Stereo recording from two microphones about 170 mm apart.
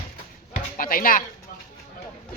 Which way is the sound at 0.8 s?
55° left (ahead or behind).